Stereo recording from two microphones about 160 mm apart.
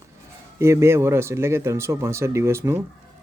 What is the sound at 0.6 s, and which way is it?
Speech, 15° right (ahead or behind).